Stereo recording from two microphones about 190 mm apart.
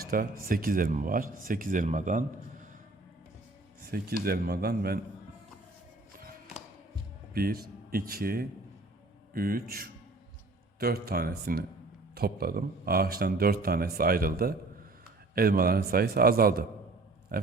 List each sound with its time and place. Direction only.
0.0 s speech: 50° right (ahead or behind)
3.9 s speech: 50° right (ahead or behind)
7.3 s speech: 50° right (ahead or behind)